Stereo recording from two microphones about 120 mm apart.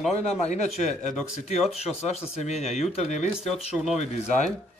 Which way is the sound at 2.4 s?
70° left (ahead or behind).